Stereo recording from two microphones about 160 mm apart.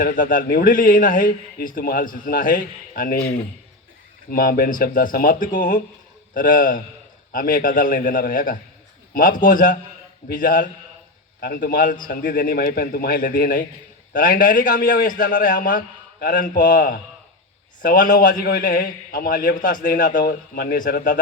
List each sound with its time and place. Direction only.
0.0 s a man's voice: 60° left (ahead or behind)
4.3 s a man's voice: 65° left (ahead or behind)
11.3 s a man's voice: 70° left (ahead or behind)